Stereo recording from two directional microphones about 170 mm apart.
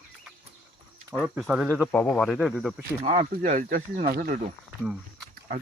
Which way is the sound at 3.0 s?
40° right (ahead or behind).